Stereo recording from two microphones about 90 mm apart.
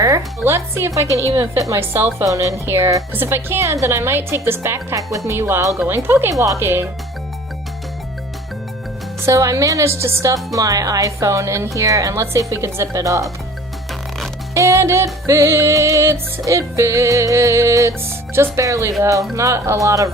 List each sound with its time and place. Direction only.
0.4 s a woman's voice: 30° right (ahead or behind)
1.9 s a woman's voice: 25° right (ahead or behind)
2.2 s a woman's voice: 35° right (ahead or behind)
9.2 s a woman's voice: 35° right (ahead or behind)
14.5 s a woman's voice: 35° right (ahead or behind)